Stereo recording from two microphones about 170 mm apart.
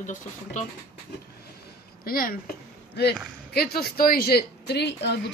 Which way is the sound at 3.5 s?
65° left (ahead or behind).